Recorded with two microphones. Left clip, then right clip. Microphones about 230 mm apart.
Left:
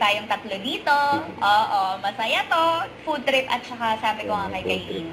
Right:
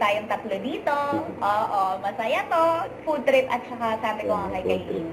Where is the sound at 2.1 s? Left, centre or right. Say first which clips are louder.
Left 1 dB; centre.